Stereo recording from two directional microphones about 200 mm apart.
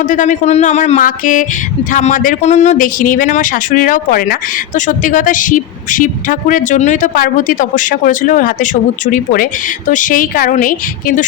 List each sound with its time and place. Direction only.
0.0 s speech: 40° left (ahead or behind)